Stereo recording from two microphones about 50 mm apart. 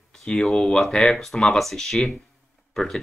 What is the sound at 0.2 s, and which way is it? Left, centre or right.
Speech, centre.